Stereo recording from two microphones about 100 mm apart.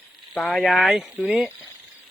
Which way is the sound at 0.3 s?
5° left (ahead or behind).